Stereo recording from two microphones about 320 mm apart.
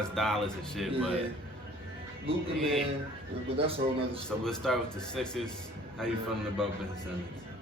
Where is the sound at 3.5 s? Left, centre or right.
Centre.